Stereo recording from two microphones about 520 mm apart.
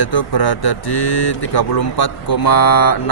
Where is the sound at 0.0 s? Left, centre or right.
Left.